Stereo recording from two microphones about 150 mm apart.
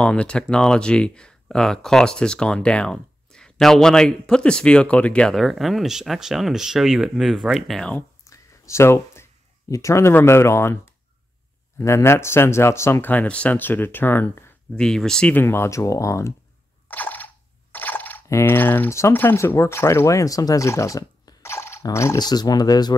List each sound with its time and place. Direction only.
0.0 s speech: 5° left (ahead or behind)
8.3 s a sound: 20° left (ahead or behind)
11.8 s speech: 15° left (ahead or behind)
14.8 s speech: 5° left (ahead or behind); by 16.3 s 20° left (ahead or behind)
16.8 s a sound: 10° left (ahead or behind)
17.7 s speech: 10° left (ahead or behind); by 22.9 s 25° left (ahead or behind)